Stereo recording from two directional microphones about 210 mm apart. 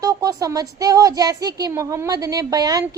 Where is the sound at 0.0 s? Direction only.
15° right (ahead or behind).